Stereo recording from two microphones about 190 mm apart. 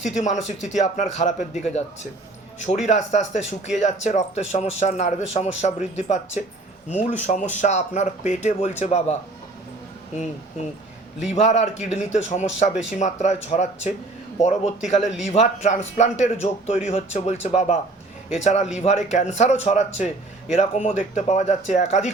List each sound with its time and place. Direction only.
0.0 s speech: 40° left (ahead or behind)
11.2 s speech: 35° left (ahead or behind)